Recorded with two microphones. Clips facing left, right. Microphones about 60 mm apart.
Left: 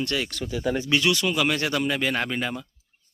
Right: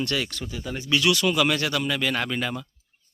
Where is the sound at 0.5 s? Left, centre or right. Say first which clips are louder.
Left 7 dB; left.